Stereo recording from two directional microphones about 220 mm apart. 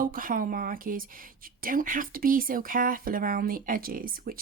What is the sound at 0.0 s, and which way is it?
Speech, 40° right (ahead or behind).